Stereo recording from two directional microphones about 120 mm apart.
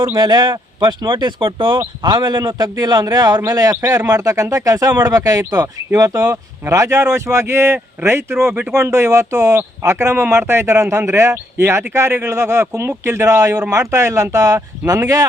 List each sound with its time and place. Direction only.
0.2 s speech: 40° right (ahead or behind)